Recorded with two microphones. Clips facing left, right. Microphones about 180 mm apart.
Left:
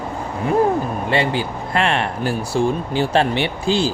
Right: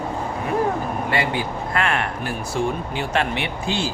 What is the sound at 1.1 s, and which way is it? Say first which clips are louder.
Speech: left 4 dB; 30° left (ahead or behind).